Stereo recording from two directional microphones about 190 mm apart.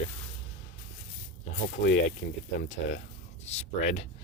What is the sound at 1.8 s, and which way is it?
Speech, 60° left (ahead or behind).